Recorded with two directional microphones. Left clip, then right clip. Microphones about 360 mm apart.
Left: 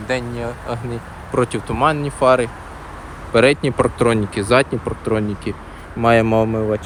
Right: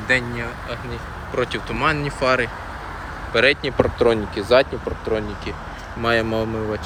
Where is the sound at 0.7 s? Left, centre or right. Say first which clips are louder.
Left 3 dB; centre.